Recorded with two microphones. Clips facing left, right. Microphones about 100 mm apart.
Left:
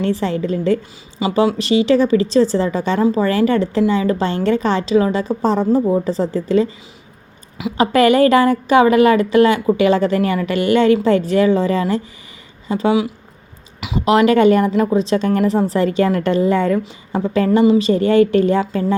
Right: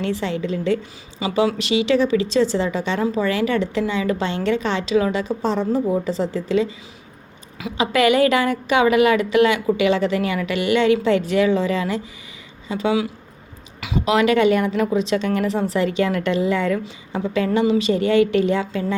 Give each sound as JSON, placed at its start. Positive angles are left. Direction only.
{"t": 0.0, "sound": "a woman's voice", "side_deg": 40}
{"t": 7.8, "sound": "a woman's voice", "side_deg": 40}
{"t": 14.0, "sound": "a woman's voice", "side_deg": 40}